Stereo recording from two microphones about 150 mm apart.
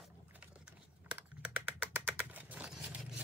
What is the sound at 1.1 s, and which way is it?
Typing, 10° right (ahead or behind).